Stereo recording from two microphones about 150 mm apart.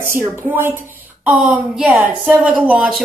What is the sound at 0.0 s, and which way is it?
A woman's voice, 15° right (ahead or behind).